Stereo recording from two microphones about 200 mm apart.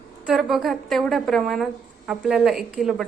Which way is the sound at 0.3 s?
Centre (ahead or behind).